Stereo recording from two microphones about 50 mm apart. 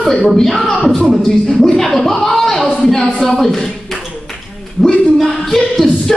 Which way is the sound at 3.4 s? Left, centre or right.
Centre.